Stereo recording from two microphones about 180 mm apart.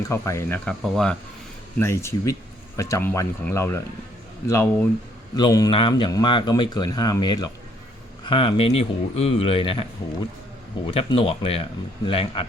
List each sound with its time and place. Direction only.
0.0 s speech: 15° left (ahead or behind)
1.8 s speech: 15° left (ahead or behind)
10.8 s speech: 30° left (ahead or behind)